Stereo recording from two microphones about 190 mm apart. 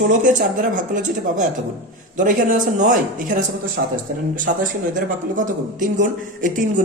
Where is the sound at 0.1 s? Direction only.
40° right (ahead or behind).